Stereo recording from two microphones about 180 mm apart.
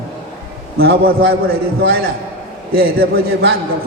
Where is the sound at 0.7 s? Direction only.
55° right (ahead or behind).